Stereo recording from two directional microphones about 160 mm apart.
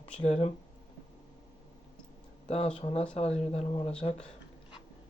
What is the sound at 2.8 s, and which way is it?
Speech, 40° left (ahead or behind).